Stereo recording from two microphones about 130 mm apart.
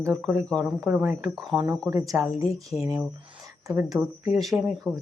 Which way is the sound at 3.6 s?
25° right (ahead or behind).